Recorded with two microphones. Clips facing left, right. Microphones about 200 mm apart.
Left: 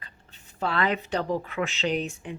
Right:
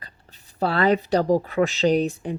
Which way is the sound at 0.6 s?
35° right (ahead or behind).